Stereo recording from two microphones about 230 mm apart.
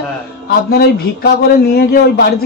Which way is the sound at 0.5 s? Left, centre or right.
Left.